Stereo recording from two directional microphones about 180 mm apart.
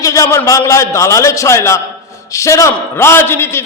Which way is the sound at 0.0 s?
20° left (ahead or behind).